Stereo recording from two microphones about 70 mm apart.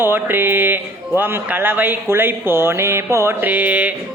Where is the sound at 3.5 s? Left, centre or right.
Right.